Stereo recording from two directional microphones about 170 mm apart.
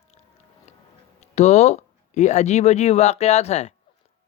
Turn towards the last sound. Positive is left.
turn(degrees=40)  # may be behind; listen again after turning